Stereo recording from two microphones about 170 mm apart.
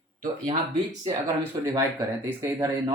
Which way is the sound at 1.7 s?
15° right (ahead or behind).